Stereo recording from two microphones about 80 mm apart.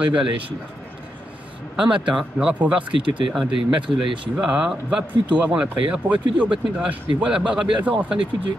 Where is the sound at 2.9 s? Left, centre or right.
Right.